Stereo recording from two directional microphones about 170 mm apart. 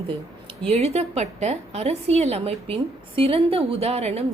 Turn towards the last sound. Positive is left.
turn(degrees=-40)  # may be behind; listen again after turning